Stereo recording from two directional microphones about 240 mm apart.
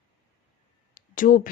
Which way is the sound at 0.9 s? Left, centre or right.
Left.